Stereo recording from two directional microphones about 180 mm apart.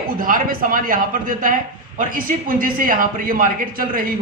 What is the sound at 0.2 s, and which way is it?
Speech, 50° right (ahead or behind).